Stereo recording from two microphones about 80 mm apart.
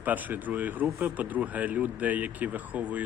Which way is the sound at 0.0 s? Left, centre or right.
Right.